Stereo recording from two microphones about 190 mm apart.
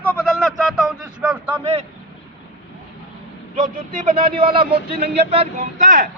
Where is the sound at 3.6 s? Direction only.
45° right (ahead or behind).